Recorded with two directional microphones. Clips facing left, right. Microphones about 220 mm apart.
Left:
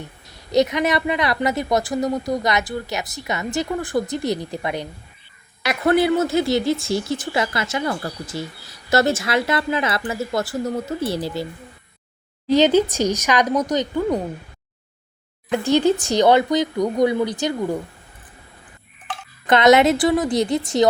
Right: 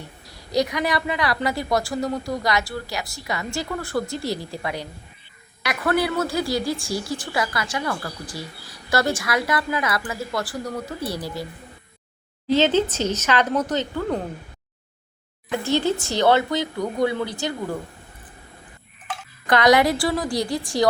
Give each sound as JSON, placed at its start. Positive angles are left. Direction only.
{"t": 0.3, "sound": "speech", "side_deg": 20}
{"t": 12.5, "sound": "speech", "side_deg": 15}
{"t": 15.6, "sound": "speech", "side_deg": 15}
{"t": 19.5, "sound": "speech", "side_deg": 25}